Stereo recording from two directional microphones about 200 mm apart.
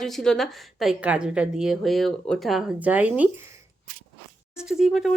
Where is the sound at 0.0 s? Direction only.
Centre (ahead or behind).